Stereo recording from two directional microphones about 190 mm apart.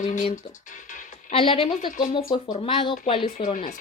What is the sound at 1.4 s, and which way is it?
Speech, 30° left (ahead or behind).